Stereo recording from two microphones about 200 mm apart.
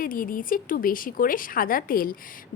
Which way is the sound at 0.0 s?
45° left (ahead or behind).